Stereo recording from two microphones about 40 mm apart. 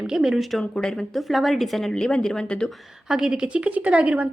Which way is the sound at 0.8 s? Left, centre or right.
Centre.